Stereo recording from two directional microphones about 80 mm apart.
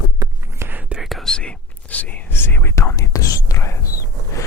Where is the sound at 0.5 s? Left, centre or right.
Right.